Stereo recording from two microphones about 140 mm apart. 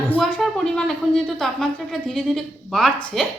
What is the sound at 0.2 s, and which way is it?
Speech, 5° left (ahead or behind).